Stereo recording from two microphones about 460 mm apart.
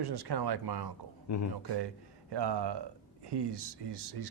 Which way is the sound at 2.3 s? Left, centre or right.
Right.